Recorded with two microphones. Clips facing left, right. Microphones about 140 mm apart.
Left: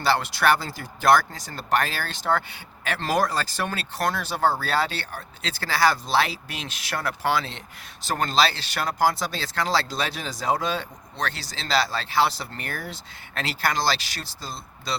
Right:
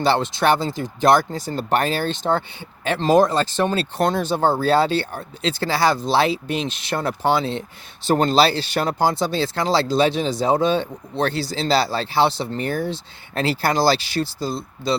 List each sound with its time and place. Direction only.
0.0 s speech: 25° right (ahead or behind)
14.3 s speech: centre (ahead or behind)